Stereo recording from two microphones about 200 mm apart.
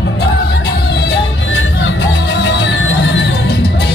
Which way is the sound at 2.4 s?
65° left (ahead or behind).